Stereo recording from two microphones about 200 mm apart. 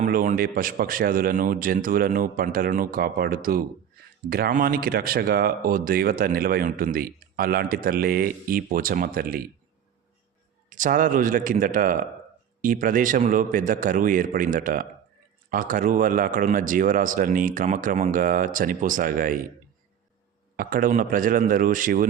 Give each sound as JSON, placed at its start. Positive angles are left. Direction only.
{"t": 0.0, "sound": "speech", "side_deg": -40}
{"t": 10.7, "sound": "speech", "side_deg": -40}
{"t": 20.6, "sound": "speech", "side_deg": -45}